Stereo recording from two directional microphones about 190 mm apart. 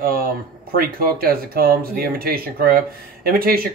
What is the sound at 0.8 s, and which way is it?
Speech, 50° right (ahead or behind).